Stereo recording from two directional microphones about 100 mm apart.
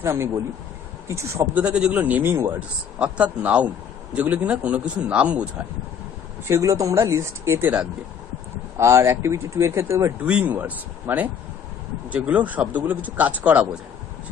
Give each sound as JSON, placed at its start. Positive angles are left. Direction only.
{"t": 0.0, "sound": "speech", "side_deg": -25}
{"t": 1.5, "sound": "a man's voice", "side_deg": -10}
{"t": 6.4, "sound": "speech", "side_deg": -30}
{"t": 8.7, "sound": "speech", "side_deg": -30}
{"t": 10.2, "sound": "a man's voice", "side_deg": -10}